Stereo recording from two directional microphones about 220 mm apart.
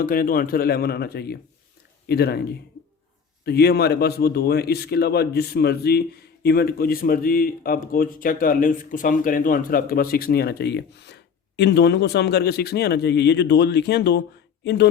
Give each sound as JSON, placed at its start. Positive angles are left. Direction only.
{"t": 0.0, "sound": "speech", "side_deg": 40}
{"t": 3.4, "sound": "speech", "side_deg": 45}